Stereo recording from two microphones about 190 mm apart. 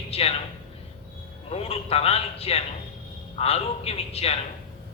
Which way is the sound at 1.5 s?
30° left (ahead or behind).